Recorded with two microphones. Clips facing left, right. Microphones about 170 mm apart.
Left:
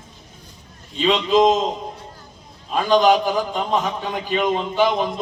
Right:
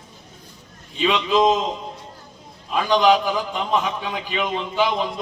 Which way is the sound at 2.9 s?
45° left (ahead or behind).